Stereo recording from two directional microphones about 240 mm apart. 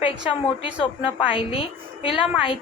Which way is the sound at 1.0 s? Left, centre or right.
Left.